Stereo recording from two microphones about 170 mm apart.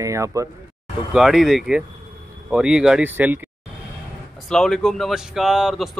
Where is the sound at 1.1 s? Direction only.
Centre (ahead or behind).